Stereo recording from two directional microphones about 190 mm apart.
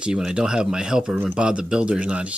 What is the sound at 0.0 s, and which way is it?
Speech, 5° right (ahead or behind).